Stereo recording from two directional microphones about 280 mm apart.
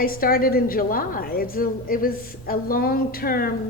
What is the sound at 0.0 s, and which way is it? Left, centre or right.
A woman's voice, left.